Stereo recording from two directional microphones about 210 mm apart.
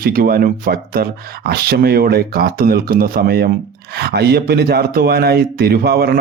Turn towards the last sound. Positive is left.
turn(degrees=-50)  # may be behind; listen again after turning